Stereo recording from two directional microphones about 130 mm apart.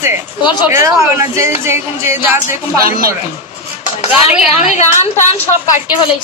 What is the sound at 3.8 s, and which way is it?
Chopping, 55° left (ahead or behind).